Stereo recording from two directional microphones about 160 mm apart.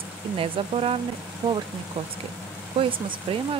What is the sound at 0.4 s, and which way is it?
Speech, 35° right (ahead or behind).